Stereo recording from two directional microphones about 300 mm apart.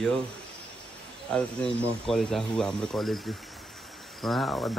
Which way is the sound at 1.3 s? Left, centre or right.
Centre.